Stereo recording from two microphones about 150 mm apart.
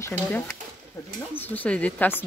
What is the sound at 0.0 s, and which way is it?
Speech, 10° left (ahead or behind).